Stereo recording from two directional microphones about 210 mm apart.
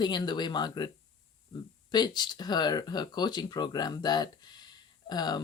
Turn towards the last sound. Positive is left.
turn(degrees=20)  # may be behind; listen again after turning